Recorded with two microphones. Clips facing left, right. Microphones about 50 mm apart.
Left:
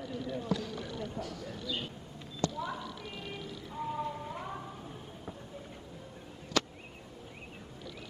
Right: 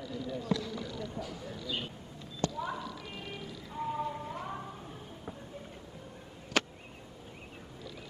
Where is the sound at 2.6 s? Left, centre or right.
Right.